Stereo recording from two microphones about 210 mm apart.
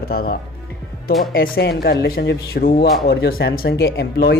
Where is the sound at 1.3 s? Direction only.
45° left (ahead or behind).